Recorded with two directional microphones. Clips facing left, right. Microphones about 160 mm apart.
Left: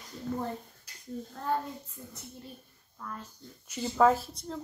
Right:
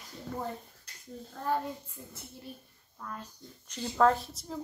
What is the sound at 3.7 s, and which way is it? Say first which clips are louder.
Speech: left 1 dB; 5° left (ahead or behind).